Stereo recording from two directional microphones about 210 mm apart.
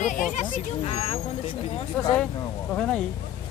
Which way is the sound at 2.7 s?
5° left (ahead or behind).